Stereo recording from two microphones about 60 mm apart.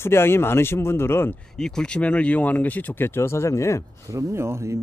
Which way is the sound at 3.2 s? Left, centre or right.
Left.